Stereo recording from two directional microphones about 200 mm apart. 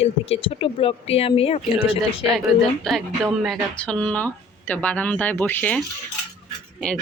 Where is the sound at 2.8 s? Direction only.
Centre (ahead or behind).